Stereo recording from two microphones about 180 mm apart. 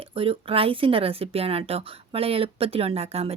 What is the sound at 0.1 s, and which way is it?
Speech, 30° right (ahead or behind).